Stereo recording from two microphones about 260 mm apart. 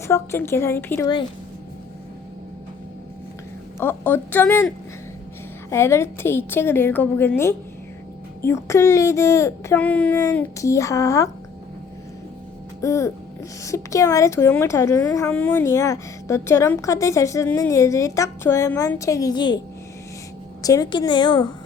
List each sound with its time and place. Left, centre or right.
0.1 s a woman's voice: centre
3.8 s a woman's voice: centre
5.7 s a woman's voice: centre
12.8 s a woman's voice: centre
20.6 s a woman's voice: centre